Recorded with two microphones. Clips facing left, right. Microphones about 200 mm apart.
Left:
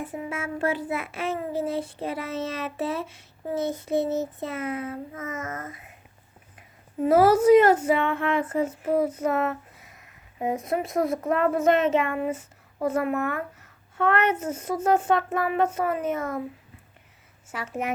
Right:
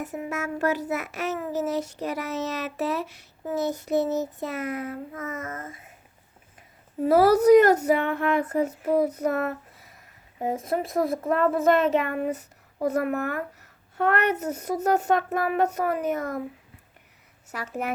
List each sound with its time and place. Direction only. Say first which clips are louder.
0.0 s child singing: right 1 dB; 45° right (ahead or behind)
2.0 s speech: even; 40° right (ahead or behind)
7.0 s speech: even; 35° right (ahead or behind)
10.8 s speech: right 1 dB; 35° right (ahead or behind)
17.5 s speech: even; 40° right (ahead or behind)